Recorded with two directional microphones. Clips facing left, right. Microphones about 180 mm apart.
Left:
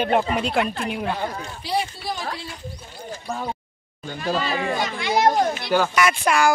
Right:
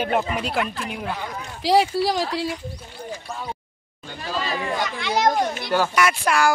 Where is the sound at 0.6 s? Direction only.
35° left (ahead or behind).